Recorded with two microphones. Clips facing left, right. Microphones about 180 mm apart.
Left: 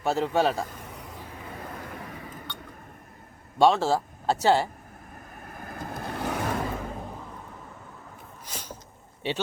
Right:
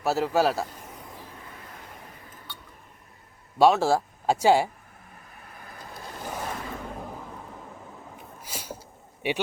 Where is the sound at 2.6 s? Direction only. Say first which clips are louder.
Left 6 dB; 55° left (ahead or behind).